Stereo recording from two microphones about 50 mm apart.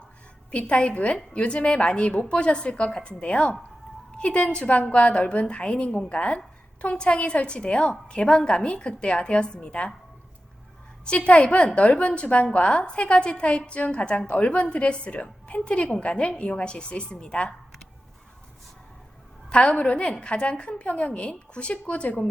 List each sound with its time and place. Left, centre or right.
0.5 s a woman's voice: left
11.0 s a woman's voice: centre
19.5 s a woman's voice: left